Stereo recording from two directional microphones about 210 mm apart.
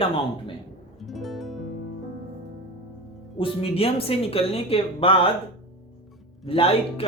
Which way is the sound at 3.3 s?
25° left (ahead or behind).